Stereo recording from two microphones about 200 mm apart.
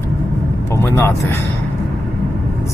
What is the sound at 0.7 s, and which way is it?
Speech, 10° left (ahead or behind).